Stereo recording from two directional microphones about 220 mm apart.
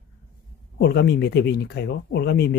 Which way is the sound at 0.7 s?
50° left (ahead or behind).